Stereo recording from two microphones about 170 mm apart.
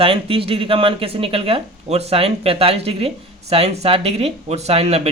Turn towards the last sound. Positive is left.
turn(degrees=-40)  # may be behind; listen again after turning